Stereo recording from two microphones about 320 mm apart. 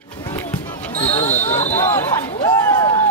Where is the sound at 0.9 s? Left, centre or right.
Centre.